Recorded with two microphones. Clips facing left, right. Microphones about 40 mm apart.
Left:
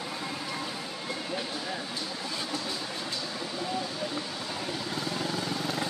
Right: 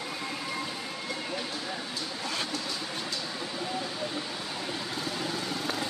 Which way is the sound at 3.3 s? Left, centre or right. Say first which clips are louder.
Left 1 dB; centre.